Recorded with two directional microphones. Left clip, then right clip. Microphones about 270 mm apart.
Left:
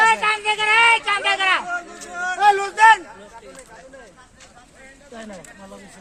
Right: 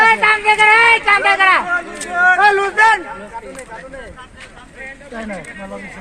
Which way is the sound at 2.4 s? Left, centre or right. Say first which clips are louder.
Right 4 dB; left.